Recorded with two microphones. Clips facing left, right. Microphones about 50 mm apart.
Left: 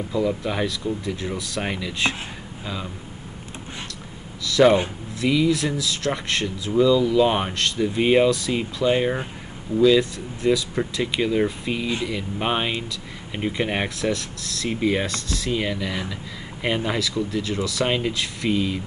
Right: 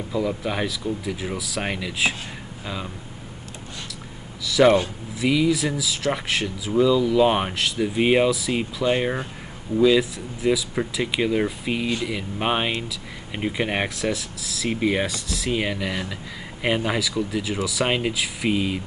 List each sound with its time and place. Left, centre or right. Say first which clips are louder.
0.1 s speech: left 1 dB; centre
4.6 s speech: even; centre
18.5 s speech: left 1 dB; centre